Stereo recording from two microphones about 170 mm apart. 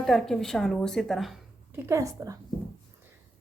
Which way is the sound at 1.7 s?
15° right (ahead or behind).